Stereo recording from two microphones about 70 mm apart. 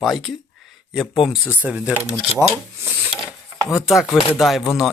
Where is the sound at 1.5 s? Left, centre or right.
Right.